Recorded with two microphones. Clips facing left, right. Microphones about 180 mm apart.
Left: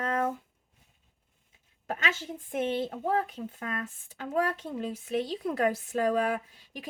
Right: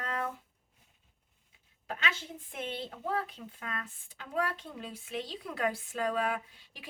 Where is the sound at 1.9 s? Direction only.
45° left (ahead or behind).